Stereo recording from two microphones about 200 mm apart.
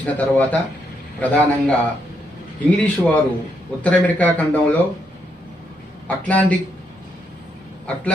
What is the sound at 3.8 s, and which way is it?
Speech, 10° left (ahead or behind).